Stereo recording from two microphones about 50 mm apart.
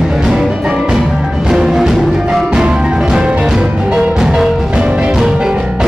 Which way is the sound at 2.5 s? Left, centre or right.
Centre.